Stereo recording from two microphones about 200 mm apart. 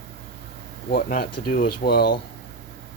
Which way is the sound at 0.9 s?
45° left (ahead or behind).